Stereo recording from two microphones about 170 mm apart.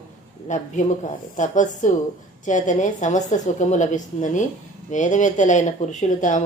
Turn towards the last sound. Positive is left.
turn(degrees=50)  # may be behind; listen again after turning